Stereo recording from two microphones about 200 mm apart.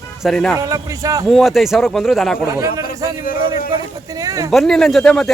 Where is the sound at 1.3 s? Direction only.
Centre (ahead or behind).